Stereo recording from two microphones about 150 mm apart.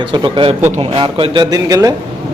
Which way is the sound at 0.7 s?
45° right (ahead or behind).